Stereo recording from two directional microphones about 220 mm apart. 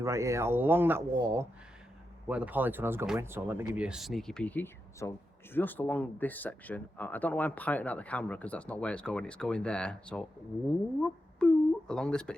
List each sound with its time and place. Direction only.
0.0 s speech: 15° right (ahead or behind); by 12.4 s 5° left (ahead or behind)